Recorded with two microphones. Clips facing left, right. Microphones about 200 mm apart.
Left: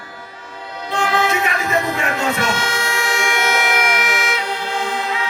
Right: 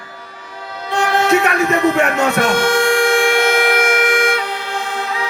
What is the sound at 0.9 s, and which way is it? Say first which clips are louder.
Music: right 4 dB; 65° right (ahead or behind).